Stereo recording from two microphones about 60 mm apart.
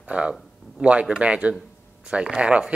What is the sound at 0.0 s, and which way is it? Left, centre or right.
Speech, centre.